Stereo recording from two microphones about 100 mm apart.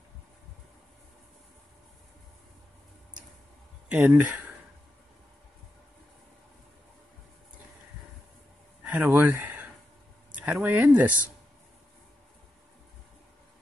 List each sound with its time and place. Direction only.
3.9 s speech: 15° right (ahead or behind)
8.8 s speech: 15° right (ahead or behind)